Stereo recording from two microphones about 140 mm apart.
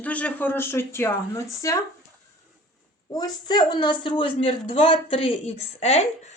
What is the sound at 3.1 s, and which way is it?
Speech, 30° left (ahead or behind).